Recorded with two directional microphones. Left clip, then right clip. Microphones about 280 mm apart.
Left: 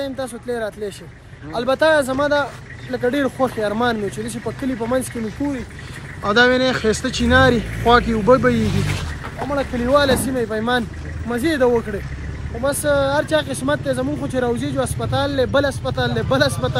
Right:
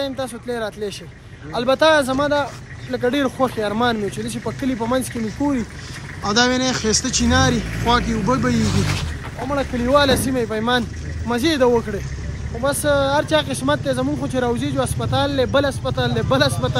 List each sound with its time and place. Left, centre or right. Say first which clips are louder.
0.0 s speech: right 1 dB; centre
6.2 s speech: left 3 dB; centre
9.4 s speech: even; centre
9.8 s speech: even; centre